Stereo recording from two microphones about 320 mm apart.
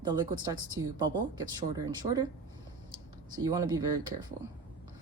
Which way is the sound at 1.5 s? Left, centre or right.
Centre.